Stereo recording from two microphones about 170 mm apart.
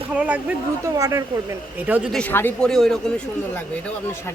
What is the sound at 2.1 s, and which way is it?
Speech, 5° left (ahead or behind).